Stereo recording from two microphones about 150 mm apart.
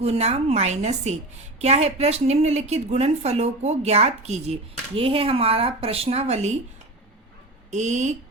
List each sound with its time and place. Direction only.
0.0 s a woman's voice: 45° right (ahead or behind)
7.7 s a woman's voice: 50° right (ahead or behind)